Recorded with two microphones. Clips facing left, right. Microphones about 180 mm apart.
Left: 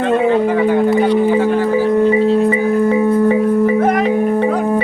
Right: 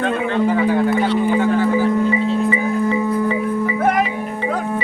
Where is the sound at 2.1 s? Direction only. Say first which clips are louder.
Left 6 dB; 40° left (ahead or behind).